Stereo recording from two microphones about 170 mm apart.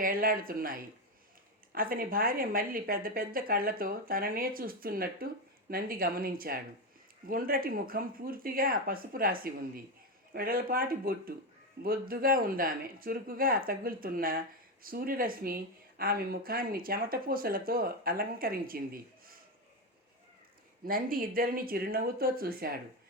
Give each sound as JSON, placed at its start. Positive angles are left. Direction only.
{"t": 0.0, "sound": "speech", "side_deg": -55}
{"t": 20.8, "sound": "speech", "side_deg": -55}